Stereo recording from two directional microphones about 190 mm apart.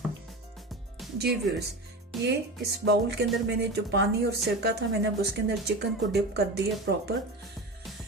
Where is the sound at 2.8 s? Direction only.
60° right (ahead or behind).